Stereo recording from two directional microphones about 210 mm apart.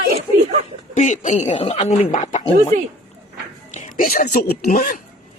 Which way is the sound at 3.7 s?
40° left (ahead or behind).